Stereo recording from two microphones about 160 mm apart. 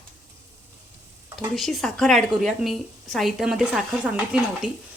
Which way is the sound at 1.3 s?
Centre (ahead or behind).